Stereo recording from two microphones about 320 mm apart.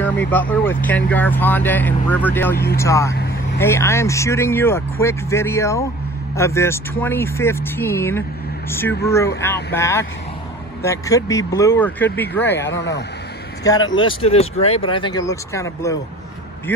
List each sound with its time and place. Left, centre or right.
0.0 s speech: centre
2.5 s speech: left
2.8 s speech: centre
12.5 s speech: left
13.7 s speech: centre